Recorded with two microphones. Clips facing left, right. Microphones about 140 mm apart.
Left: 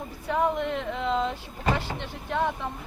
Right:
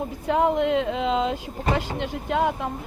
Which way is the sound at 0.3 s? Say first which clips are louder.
Right 5 dB; 20° right (ahead or behind).